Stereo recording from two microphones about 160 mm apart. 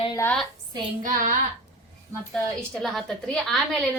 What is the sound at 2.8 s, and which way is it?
Speech, centre (ahead or behind).